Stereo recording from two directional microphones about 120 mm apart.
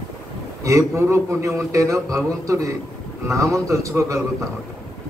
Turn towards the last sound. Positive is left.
turn(degrees=-25)  # may be behind; listen again after turning